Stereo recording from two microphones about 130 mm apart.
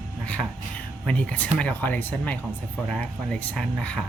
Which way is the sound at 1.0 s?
10° left (ahead or behind).